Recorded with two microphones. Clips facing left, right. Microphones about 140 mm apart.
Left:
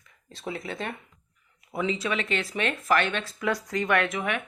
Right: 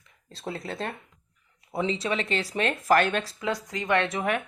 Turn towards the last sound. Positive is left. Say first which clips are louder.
# right 2 dB
turn(degrees=-35)  # may be behind; listen again after turning